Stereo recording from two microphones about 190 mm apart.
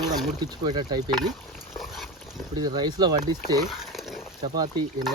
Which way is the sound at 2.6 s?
20° right (ahead or behind).